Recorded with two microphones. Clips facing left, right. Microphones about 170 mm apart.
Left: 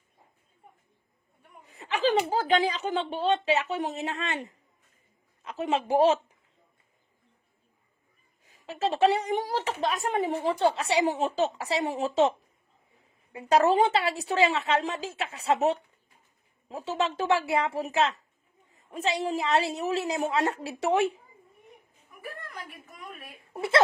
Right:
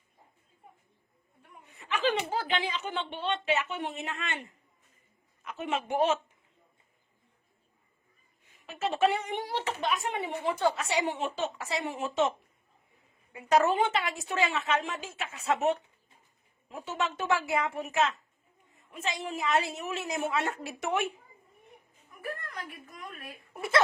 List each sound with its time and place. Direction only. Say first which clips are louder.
1.6 s a sound: left 3 dB; 30° left (ahead or behind)
2.3 s speech: left 7 dB; 40° left (ahead or behind)
8.6 s speech: left 4 dB; 30° left (ahead or behind)
13.3 s speech: left 3 dB; 30° left (ahead or behind)
22.7 s a woman's voice: even; centre (ahead or behind)
23.6 s speech: left 3 dB; 25° left (ahead or behind)